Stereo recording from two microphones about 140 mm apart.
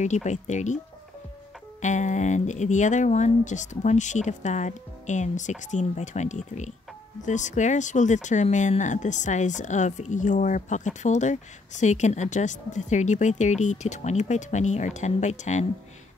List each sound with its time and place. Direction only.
0.0 s speech: 55° left (ahead or behind)
1.8 s speech: 60° left (ahead or behind)